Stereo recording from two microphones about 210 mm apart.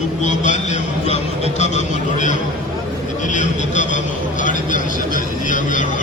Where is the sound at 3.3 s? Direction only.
35° left (ahead or behind).